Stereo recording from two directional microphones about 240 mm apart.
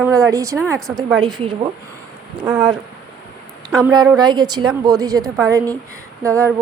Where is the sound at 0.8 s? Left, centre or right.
Centre.